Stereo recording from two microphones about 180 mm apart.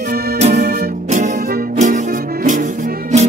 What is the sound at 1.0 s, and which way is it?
Music, 40° right (ahead or behind).